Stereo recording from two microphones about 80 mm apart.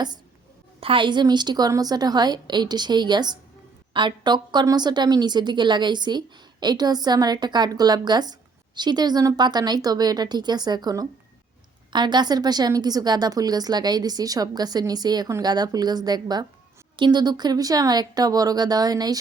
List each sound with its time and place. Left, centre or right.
0.9 s a woman's voice: right